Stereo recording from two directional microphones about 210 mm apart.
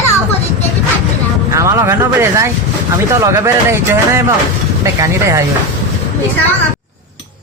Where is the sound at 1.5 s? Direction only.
15° right (ahead or behind).